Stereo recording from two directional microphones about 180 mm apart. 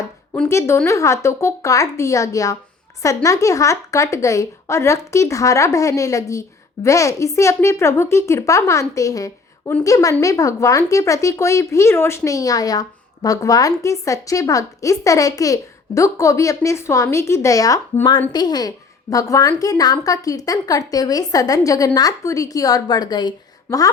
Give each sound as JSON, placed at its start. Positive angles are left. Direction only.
{"t": 0.4, "sound": "a woman's voice", "side_deg": 15}